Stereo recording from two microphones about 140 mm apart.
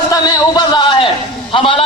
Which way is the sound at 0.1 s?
30° left (ahead or behind).